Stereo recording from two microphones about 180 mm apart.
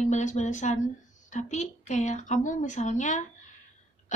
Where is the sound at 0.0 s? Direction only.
40° left (ahead or behind).